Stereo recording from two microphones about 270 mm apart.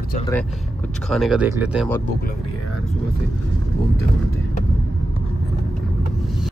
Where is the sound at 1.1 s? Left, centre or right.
Centre.